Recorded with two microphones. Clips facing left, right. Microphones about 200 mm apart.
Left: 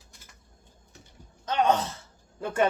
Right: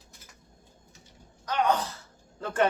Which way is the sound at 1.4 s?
25° left (ahead or behind).